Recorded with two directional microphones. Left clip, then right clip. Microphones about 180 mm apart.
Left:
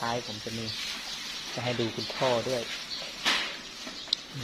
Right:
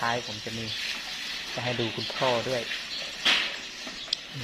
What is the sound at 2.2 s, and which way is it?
Speech, 10° right (ahead or behind).